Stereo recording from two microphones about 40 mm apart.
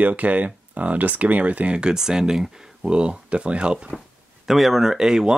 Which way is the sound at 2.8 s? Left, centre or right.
Right.